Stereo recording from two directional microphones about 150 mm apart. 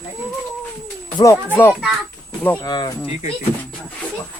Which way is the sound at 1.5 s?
10° left (ahead or behind).